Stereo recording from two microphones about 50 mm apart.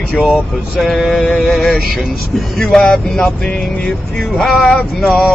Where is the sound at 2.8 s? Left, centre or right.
Left.